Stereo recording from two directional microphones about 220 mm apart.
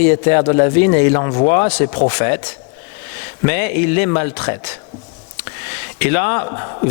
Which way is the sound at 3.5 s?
15° left (ahead or behind).